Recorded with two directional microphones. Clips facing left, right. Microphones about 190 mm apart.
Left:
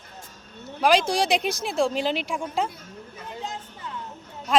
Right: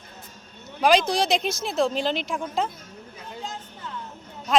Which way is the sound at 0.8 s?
5° left (ahead or behind).